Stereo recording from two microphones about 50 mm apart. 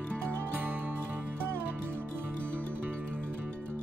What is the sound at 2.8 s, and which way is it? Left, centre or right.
Music, right.